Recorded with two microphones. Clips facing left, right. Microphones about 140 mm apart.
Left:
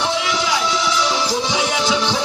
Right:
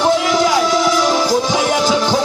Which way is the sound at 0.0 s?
45° right (ahead or behind).